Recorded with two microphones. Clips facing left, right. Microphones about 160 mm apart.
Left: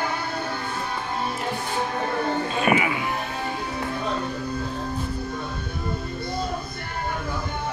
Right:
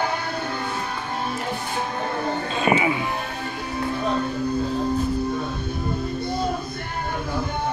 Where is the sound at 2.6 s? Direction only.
25° right (ahead or behind).